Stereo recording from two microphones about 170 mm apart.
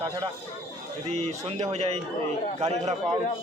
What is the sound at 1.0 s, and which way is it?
Speech, 40° right (ahead or behind).